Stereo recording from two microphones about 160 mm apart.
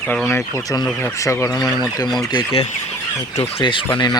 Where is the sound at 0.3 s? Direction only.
15° left (ahead or behind).